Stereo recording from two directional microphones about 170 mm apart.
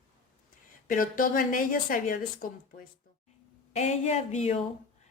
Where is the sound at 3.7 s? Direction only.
40° left (ahead or behind).